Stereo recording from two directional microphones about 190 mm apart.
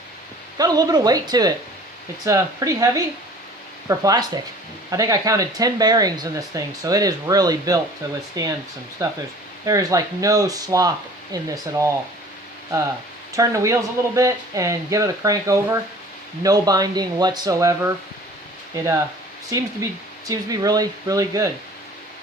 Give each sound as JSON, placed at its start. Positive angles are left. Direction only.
{"t": 0.6, "sound": "speech", "side_deg": -20}
{"t": 13.3, "sound": "speech", "side_deg": -15}
{"t": 19.5, "sound": "speech", "side_deg": -15}